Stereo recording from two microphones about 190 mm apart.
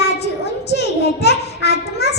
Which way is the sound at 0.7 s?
60° left (ahead or behind).